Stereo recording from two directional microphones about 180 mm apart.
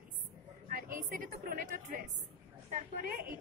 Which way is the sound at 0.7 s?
50° right (ahead or behind).